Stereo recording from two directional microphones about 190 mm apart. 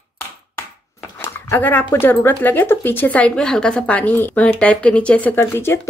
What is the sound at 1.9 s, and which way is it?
Speech, 10° left (ahead or behind).